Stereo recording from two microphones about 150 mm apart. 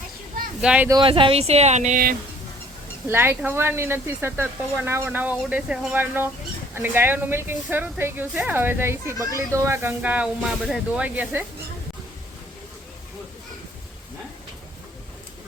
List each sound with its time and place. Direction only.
0.6 s speech: 5° right (ahead or behind)
0.9 s speech: 30° right (ahead or behind); by 2.0 s 50° right (ahead or behind)
3.1 s speech: 15° right (ahead or behind)